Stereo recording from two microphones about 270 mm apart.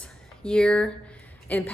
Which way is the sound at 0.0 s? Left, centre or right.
Centre.